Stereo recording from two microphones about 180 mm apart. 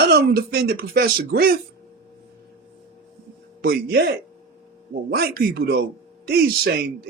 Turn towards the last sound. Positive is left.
turn(degrees=-60)  # may be behind; listen again after turning